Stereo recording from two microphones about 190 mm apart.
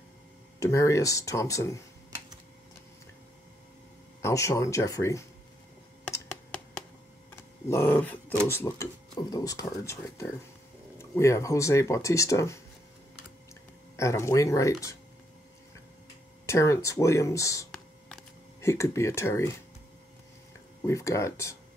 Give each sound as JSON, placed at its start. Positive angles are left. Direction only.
{"t": 0.6, "sound": "speech", "side_deg": 15}
{"t": 4.2, "sound": "speech", "side_deg": 15}
{"t": 6.0, "sound": "a sound", "side_deg": 5}
{"t": 7.7, "sound": "speech", "side_deg": 10}
{"t": 13.9, "sound": "speech", "side_deg": 15}
{"t": 16.4, "sound": "speech", "side_deg": 15}
{"t": 17.6, "sound": "a sound", "side_deg": 5}
{"t": 18.6, "sound": "speech", "side_deg": 15}
{"t": 20.8, "sound": "speech", "side_deg": 15}